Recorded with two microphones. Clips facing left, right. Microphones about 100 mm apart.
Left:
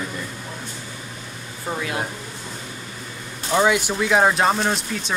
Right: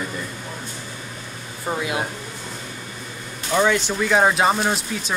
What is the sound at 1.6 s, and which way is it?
Speech, 15° right (ahead or behind).